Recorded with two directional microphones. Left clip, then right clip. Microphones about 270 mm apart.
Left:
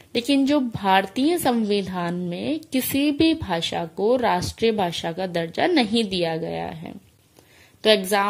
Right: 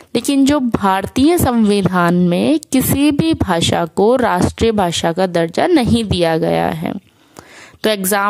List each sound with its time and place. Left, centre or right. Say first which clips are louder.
0.1 s a woman's voice: right 6 dB; right